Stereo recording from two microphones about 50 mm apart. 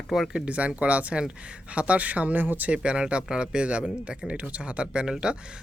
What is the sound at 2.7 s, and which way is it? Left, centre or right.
Speech, right.